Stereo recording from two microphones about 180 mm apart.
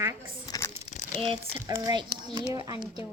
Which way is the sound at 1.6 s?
20° right (ahead or behind).